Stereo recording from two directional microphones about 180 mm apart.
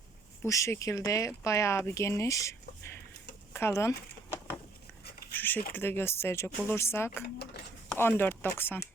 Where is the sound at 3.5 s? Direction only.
15° left (ahead or behind).